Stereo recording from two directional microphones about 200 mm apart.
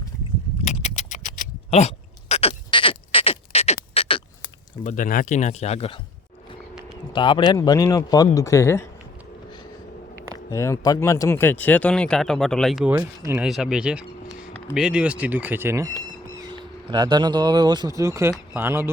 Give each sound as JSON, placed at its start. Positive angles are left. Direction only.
{"t": 0.6, "sound": "a sound", "side_deg": 35}
{"t": 2.3, "sound": "rodents", "side_deg": 25}
{"t": 4.8, "sound": "speech", "side_deg": 40}
{"t": 7.1, "sound": "speech", "side_deg": 25}
{"t": 10.5, "sound": "speech", "side_deg": 15}